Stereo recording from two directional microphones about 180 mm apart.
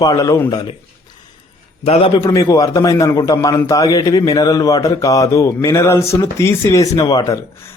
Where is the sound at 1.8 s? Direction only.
35° left (ahead or behind).